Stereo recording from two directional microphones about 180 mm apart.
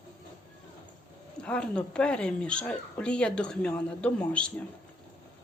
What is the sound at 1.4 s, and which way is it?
Speech, 5° left (ahead or behind).